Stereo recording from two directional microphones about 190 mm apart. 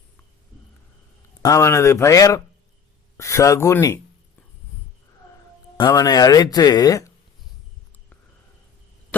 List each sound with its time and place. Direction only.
1.4 s speech: 15° left (ahead or behind)
5.7 s speech: 20° left (ahead or behind)